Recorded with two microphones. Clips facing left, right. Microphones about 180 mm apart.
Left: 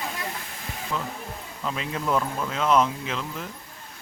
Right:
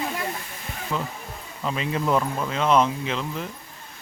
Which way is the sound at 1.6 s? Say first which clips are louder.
Right 4 dB; centre (ahead or behind).